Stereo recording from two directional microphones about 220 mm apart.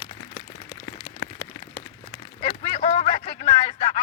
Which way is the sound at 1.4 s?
20° left (ahead or behind).